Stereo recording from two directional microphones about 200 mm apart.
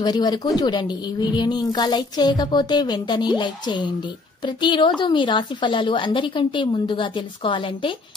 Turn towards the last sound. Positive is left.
turn(degrees=25)  # may be behind; listen again after turning